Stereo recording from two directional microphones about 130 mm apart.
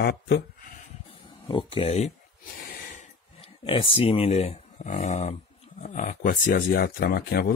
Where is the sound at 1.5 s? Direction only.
50° left (ahead or behind).